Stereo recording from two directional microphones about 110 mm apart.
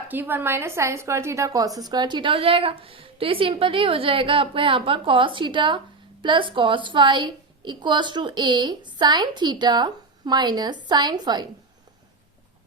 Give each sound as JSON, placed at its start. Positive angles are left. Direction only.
{"t": 0.1, "sound": "a woman's voice", "side_deg": -20}